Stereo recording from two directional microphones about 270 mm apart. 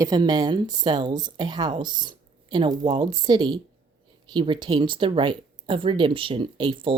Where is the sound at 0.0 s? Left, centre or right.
Centre.